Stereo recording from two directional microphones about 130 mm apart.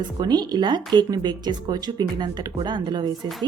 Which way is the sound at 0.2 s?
30° right (ahead or behind).